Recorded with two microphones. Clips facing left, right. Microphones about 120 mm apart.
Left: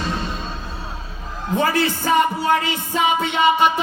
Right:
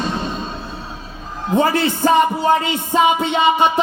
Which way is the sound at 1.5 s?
25° right (ahead or behind).